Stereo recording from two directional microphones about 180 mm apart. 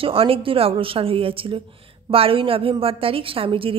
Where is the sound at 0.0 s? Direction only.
30° right (ahead or behind).